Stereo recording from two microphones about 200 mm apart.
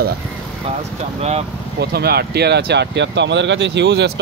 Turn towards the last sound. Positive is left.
turn(degrees=-60)  # may be behind; listen again after turning